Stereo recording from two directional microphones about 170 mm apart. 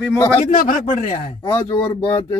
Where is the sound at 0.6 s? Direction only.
50° left (ahead or behind).